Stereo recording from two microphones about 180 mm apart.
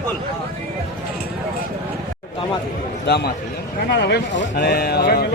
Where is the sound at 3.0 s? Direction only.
65° left (ahead or behind).